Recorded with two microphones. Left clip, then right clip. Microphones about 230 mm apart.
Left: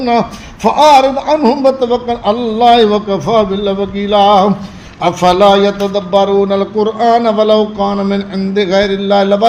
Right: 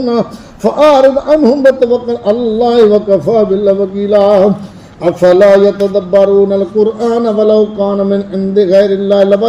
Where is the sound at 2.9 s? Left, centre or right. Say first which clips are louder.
Right 3 dB; centre.